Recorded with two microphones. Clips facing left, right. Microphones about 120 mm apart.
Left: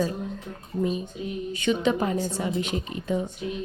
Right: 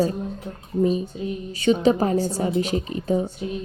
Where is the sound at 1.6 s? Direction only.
35° right (ahead or behind).